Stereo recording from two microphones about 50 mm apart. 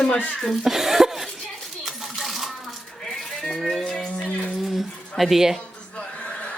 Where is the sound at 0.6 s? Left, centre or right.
Centre.